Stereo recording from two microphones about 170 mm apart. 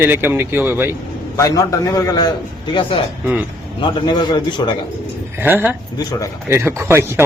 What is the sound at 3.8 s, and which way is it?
Speech, 25° left (ahead or behind).